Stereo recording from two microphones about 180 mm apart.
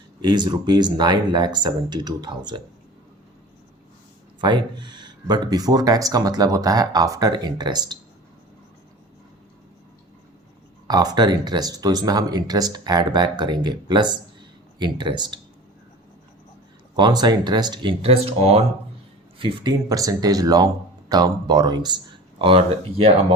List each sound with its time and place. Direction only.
0.2 s speech: 25° right (ahead or behind)
4.4 s speech: 25° right (ahead or behind)
10.8 s speech: 20° right (ahead or behind)
17.0 s speech: 25° right (ahead or behind)